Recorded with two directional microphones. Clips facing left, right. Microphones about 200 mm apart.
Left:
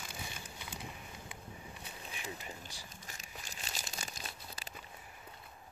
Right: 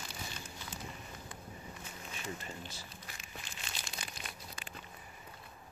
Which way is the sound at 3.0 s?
40° left (ahead or behind).